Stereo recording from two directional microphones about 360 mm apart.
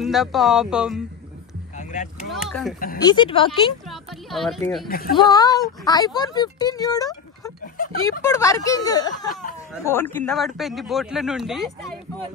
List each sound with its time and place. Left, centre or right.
0.0 s a man's voice: centre
2.3 s a man's voice: centre
3.0 s speech: centre
3.8 s a sound: centre
4.8 s speech: left
5.1 s speech: centre
7.6 s a sound: left
8.2 s a man's voice: centre